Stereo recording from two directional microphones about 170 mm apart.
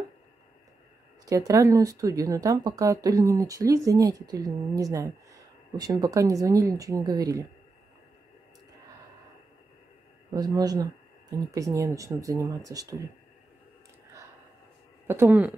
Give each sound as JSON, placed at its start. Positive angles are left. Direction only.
{"t": 1.2, "sound": "speech", "side_deg": -20}
{"t": 10.3, "sound": "speech", "side_deg": -25}
{"t": 15.0, "sound": "speech", "side_deg": -10}